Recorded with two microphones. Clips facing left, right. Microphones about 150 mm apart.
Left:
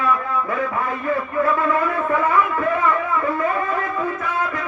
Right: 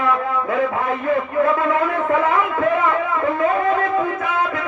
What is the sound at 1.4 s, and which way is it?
Speech, 20° right (ahead or behind).